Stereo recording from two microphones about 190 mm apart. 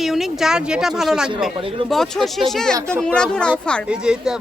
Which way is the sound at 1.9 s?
Centre (ahead or behind).